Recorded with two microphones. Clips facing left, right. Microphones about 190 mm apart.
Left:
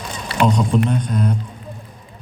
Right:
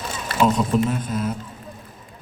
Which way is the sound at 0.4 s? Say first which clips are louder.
Left 2 dB; 5° right (ahead or behind).